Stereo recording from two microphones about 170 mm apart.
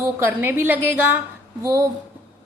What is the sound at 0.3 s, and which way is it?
Speech, 15° right (ahead or behind).